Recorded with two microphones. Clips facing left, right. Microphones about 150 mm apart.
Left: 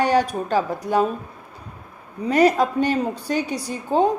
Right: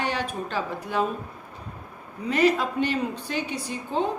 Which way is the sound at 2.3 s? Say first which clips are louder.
Left 5 dB; 40° left (ahead or behind).